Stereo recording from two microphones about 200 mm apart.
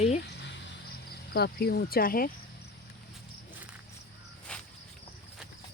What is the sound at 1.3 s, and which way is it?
Speech, 55° left (ahead or behind).